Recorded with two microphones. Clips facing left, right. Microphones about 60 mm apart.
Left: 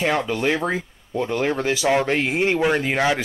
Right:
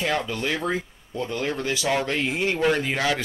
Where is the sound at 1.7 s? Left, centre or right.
Left.